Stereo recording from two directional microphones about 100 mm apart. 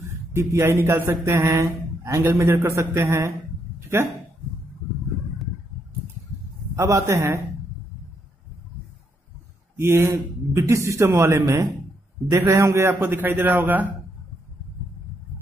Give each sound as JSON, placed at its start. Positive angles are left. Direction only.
{"t": 0.3, "sound": "a man's voice", "side_deg": -30}
{"t": 6.7, "sound": "a man's voice", "side_deg": -30}
{"t": 9.8, "sound": "a man's voice", "side_deg": -25}